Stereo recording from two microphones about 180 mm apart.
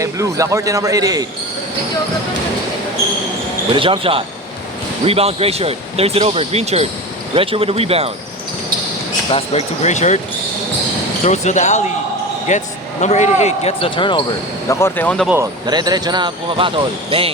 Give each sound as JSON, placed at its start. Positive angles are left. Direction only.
{"t": 0.0, "sound": "speech", "side_deg": -15}
{"t": 3.7, "sound": "speech", "side_deg": -30}
{"t": 9.3, "sound": "speech", "side_deg": 35}
{"t": 11.2, "sound": "a man's voice", "side_deg": 40}
{"t": 14.7, "sound": "speech", "side_deg": 15}
{"t": 15.6, "sound": "speech", "side_deg": -25}